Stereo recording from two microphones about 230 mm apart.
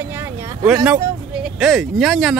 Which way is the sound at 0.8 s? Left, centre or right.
Centre.